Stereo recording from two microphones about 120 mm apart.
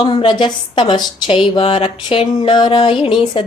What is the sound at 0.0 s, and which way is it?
Speech, 45° left (ahead or behind).